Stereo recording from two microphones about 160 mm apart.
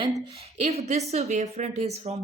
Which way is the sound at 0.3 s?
40° right (ahead or behind).